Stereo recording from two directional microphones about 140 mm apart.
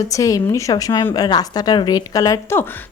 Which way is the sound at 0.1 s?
25° left (ahead or behind).